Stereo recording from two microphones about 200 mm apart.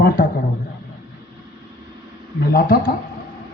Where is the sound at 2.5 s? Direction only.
45° left (ahead or behind).